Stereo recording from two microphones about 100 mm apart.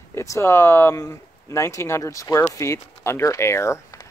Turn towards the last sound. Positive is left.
turn(degrees=30)  # may be behind; listen again after turning